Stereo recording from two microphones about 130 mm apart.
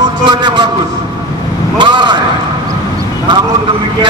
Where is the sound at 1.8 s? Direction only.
35° right (ahead or behind).